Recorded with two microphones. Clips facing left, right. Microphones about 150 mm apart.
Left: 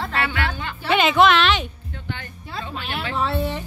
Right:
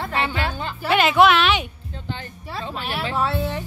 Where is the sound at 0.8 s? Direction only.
5° right (ahead or behind).